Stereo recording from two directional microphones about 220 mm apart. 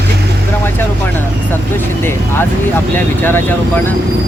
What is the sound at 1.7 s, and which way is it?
Speech, 10° left (ahead or behind).